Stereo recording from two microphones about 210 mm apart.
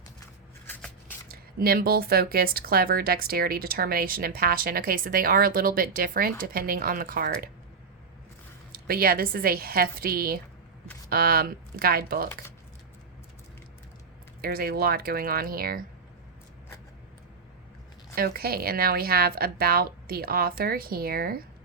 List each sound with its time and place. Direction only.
1.3 s speech: 45° right (ahead or behind)
8.7 s speech: 45° right (ahead or behind)
14.4 s speech: 45° right (ahead or behind)
18.1 s speech: 45° right (ahead or behind)